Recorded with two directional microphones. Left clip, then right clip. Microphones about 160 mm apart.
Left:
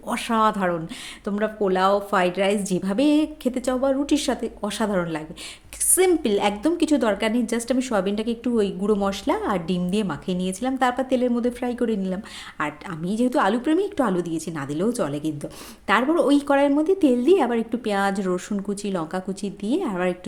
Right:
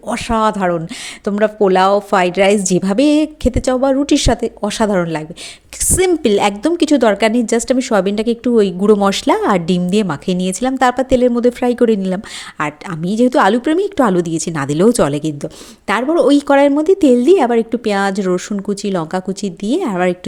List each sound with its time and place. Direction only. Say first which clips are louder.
0.1 s a woman's voice: right 6 dB; 30° right (ahead or behind)
6.2 s a woman's voice: right 8 dB; 40° right (ahead or behind)
15.9 s a woman's voice: right 7 dB; 30° right (ahead or behind)